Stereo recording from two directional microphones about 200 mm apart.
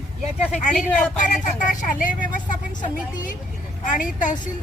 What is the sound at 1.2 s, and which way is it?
Speech, 40° left (ahead or behind).